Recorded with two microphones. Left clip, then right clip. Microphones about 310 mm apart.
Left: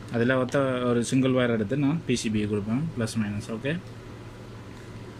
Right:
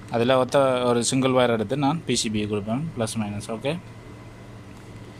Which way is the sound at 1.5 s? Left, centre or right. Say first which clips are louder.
Right 3 dB; right.